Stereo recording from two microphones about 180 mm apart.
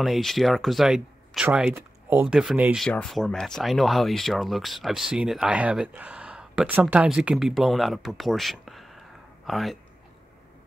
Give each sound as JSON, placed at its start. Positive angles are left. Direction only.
{"t": 0.0, "sound": "speech", "side_deg": 0}